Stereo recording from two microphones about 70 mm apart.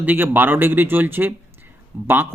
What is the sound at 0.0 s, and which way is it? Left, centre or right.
Speech, right.